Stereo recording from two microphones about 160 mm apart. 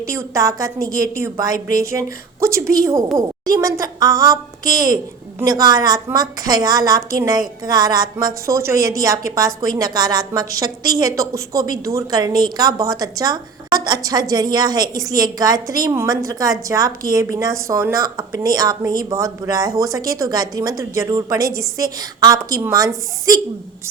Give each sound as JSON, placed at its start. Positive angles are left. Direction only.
{"t": 0.0, "sound": "a woman's voice", "side_deg": -20}